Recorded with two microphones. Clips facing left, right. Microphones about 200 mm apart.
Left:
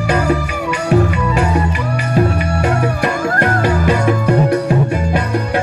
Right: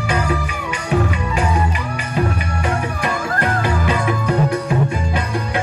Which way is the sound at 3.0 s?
45° left (ahead or behind).